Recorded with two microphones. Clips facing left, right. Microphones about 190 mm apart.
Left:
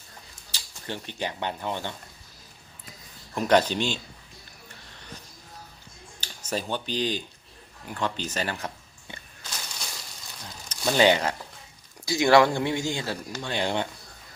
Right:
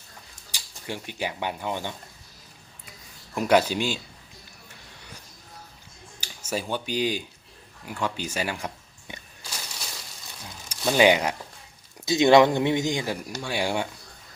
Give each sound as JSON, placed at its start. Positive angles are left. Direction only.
{"t": 0.5, "sound": "speech", "side_deg": -10}
{"t": 3.3, "sound": "speech", "side_deg": -10}
{"t": 6.1, "sound": "speech", "side_deg": -10}
{"t": 7.9, "sound": "a sound", "side_deg": -10}
{"t": 12.0, "sound": "speech", "side_deg": -20}